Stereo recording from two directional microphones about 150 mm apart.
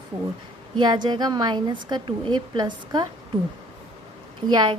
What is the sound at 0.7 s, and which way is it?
A woman's voice, 30° right (ahead or behind).